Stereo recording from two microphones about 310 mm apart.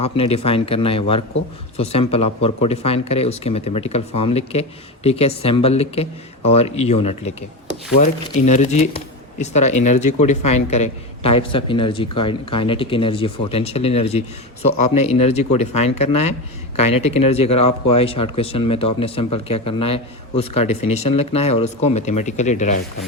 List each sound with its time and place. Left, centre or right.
0.0 s speech: centre